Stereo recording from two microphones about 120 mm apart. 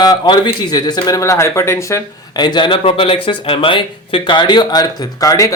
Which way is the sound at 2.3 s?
40° left (ahead or behind).